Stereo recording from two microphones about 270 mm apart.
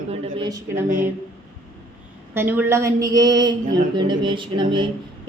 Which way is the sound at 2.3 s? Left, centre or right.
Centre.